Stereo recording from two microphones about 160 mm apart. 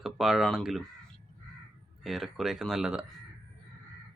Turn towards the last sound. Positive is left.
turn(degrees=-5)  # may be behind; listen again after turning